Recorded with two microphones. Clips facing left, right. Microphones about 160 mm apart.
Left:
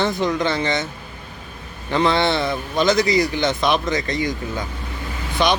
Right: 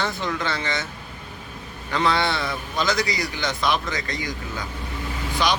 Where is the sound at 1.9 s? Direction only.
25° left (ahead or behind).